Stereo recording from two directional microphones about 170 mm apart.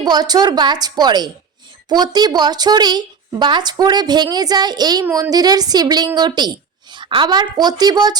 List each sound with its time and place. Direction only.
0.0 s a woman's voice: 25° right (ahead or behind)